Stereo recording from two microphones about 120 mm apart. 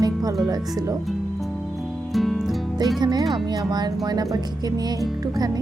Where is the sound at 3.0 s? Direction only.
35° right (ahead or behind).